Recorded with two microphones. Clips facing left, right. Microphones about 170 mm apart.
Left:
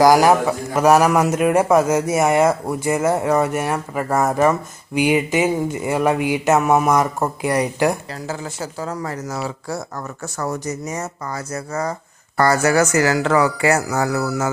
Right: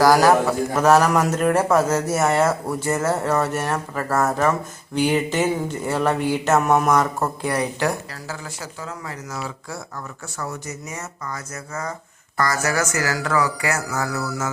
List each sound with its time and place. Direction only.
0.0 s a man's voice: 15° left (ahead or behind)
8.6 s speech: 40° left (ahead or behind)